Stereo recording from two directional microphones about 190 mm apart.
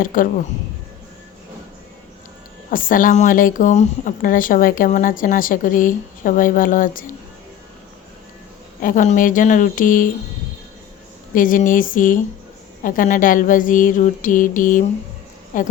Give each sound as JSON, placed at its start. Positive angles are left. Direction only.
{"t": 0.0, "sound": "a woman's voice", "side_deg": 45}
{"t": 2.6, "sound": "a woman's voice", "side_deg": 45}
{"t": 8.8, "sound": "a woman's voice", "side_deg": 45}
{"t": 11.3, "sound": "a woman's voice", "side_deg": 45}